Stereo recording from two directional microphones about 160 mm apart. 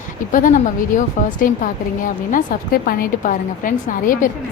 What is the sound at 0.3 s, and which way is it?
A woman's voice, 55° left (ahead or behind).